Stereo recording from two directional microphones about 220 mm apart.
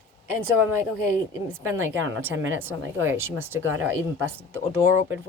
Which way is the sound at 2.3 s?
65° right (ahead or behind).